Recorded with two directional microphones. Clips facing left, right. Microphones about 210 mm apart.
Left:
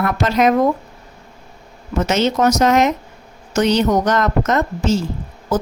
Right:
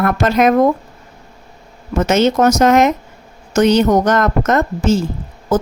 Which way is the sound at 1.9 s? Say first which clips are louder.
Right 4 dB; 50° right (ahead or behind).